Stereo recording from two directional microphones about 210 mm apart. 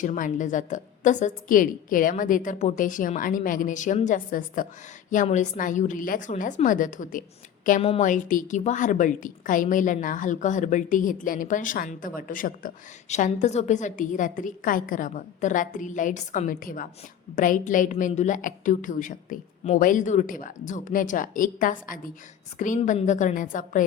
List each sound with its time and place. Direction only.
0.0 s a woman's voice: 35° left (ahead or behind)
7.8 s a woman's voice: 30° left (ahead or behind)